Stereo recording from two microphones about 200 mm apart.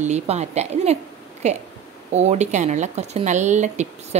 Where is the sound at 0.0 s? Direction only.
35° right (ahead or behind).